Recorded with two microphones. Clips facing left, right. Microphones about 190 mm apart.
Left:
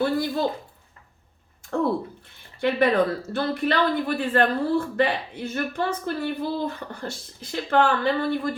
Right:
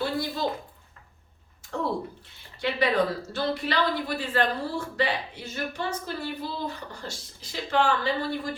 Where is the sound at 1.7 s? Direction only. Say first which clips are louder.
Left 6 dB; 50° left (ahead or behind).